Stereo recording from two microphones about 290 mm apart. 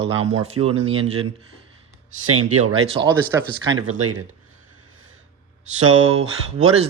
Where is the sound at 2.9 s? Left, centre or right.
Centre.